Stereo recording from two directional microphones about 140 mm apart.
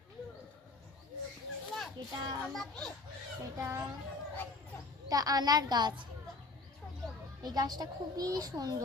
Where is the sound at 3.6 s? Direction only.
20° right (ahead or behind).